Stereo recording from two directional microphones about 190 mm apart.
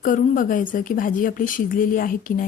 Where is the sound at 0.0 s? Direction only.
45° left (ahead or behind).